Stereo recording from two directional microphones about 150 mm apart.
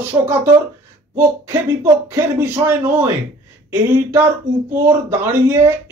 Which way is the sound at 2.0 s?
15° right (ahead or behind).